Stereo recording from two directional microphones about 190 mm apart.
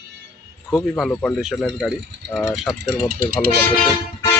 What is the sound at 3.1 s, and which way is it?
Speech, 50° right (ahead or behind).